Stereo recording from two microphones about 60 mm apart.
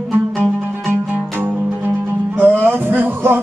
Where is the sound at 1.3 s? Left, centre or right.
Right.